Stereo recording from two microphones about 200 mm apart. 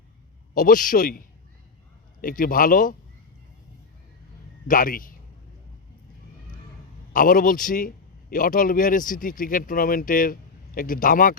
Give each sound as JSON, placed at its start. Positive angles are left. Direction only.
{"t": 0.5, "sound": "a man's voice", "side_deg": 40}
{"t": 4.7, "sound": "a man's voice", "side_deg": 45}
{"t": 7.1, "sound": "a man's voice", "side_deg": 45}